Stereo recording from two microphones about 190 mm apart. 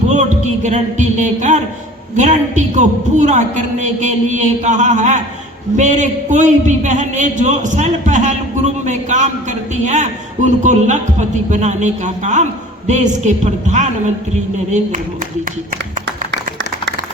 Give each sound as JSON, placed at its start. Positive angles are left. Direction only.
{"t": 0.1, "sound": "a man's voice", "side_deg": -40}